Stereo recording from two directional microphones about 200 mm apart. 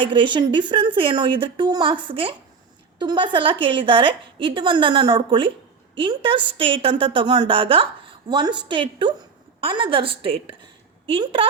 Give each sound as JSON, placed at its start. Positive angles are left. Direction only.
{"t": 0.0, "sound": "a woman's voice", "side_deg": -25}